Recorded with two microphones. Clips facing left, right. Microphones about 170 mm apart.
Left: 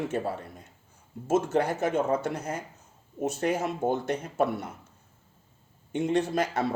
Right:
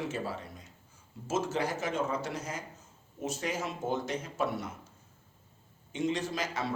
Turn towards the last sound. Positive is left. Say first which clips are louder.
# left 8 dB
turn(degrees=60)  # may be behind; listen again after turning